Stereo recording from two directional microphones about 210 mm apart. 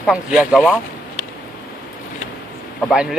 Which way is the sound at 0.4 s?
Centre (ahead or behind).